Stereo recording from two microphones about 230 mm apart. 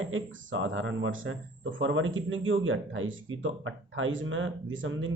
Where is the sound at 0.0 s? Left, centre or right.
Right.